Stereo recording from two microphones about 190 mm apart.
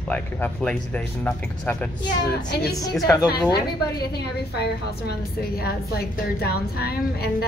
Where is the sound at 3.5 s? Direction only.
55° left (ahead or behind).